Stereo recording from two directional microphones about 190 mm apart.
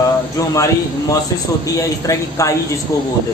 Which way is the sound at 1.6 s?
15° left (ahead or behind).